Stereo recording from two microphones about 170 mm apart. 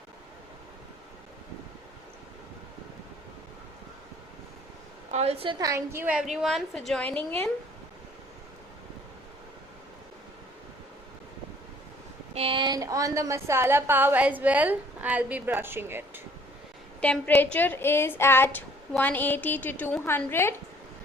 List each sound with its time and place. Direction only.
5.1 s a woman's voice: 35° right (ahead or behind)
5.5 s a woman's voice: 20° right (ahead or behind); by 7.2 s 5° left (ahead or behind)
12.3 s a woman's voice: 35° right (ahead or behind); by 16.2 s 15° right (ahead or behind)
17.0 s a woman's voice: 10° left (ahead or behind)